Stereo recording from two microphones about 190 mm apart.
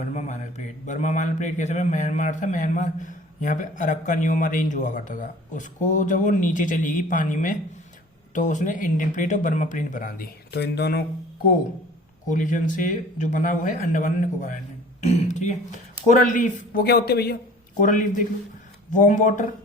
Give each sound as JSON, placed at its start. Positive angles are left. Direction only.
{"t": 0.0, "sound": "speech", "side_deg": 35}
{"t": 12.3, "sound": "speech", "side_deg": 40}
{"t": 17.7, "sound": "speech", "side_deg": 45}